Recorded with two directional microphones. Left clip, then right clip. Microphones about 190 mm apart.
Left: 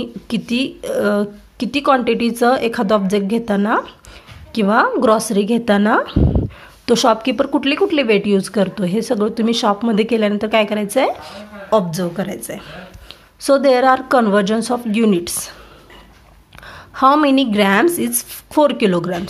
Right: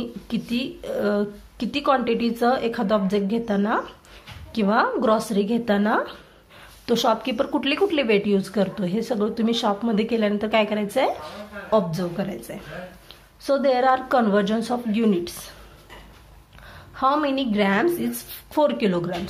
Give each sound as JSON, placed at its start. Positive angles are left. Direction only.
{"t": 0.0, "sound": "a woman's voice", "side_deg": 30}
{"t": 11.9, "sound": "speech", "side_deg": 40}
{"t": 16.6, "sound": "speech", "side_deg": 35}